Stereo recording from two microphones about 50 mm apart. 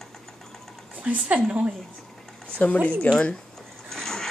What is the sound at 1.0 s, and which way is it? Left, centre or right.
Speech, right.